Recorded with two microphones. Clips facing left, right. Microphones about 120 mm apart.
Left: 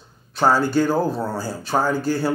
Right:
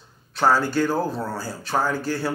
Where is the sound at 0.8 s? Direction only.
25° left (ahead or behind).